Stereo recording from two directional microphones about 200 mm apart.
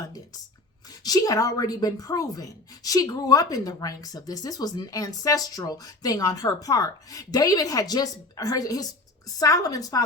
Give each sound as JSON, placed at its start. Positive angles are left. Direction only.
{"t": 1.0, "sound": "speech", "side_deg": 20}